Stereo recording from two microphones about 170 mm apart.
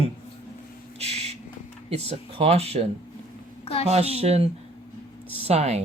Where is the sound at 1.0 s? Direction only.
40° right (ahead or behind).